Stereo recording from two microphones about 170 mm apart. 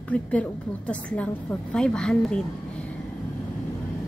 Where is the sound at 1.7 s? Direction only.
5° left (ahead or behind).